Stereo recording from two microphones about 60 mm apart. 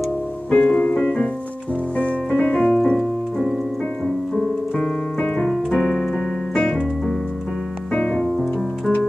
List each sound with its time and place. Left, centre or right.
0.5 s music: centre
3.0 s keyboard: centre
4.4 s piano: centre
5.7 s keyboard: centre
7.9 s music: left